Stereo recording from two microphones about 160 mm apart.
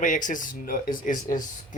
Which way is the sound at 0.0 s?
55° left (ahead or behind).